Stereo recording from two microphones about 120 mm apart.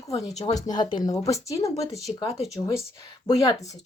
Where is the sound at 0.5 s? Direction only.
35° left (ahead or behind).